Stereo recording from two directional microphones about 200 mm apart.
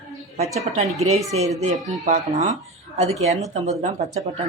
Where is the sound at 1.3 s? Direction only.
90° right.